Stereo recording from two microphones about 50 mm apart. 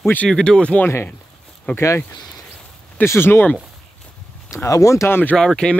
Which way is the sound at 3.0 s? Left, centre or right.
Left.